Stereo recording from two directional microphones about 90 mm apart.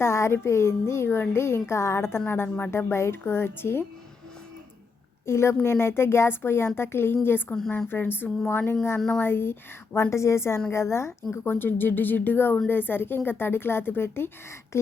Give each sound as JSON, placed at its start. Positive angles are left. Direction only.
{"t": 0.0, "sound": "speech", "side_deg": 30}
{"t": 5.2, "sound": "a woman's voice", "side_deg": 30}
{"t": 9.0, "sound": "speech", "side_deg": 5}
{"t": 9.2, "sound": "speech", "side_deg": 25}